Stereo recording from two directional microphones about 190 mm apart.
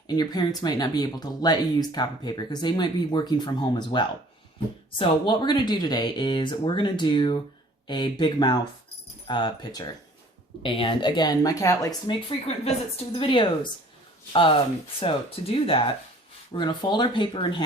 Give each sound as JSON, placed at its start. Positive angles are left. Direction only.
{"t": 0.2, "sound": "speech", "side_deg": 20}
{"t": 12.6, "sound": "speech", "side_deg": 30}
{"t": 15.0, "sound": "speech", "side_deg": 30}